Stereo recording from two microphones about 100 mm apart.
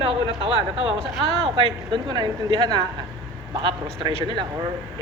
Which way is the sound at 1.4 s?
50° right (ahead or behind).